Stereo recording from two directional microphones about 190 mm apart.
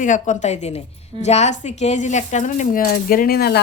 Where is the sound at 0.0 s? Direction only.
40° left (ahead or behind).